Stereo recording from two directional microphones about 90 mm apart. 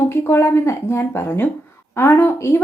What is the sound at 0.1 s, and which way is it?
A woman's voice, 30° left (ahead or behind).